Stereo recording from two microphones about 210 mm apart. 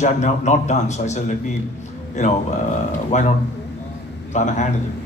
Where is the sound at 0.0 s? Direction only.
35° left (ahead or behind).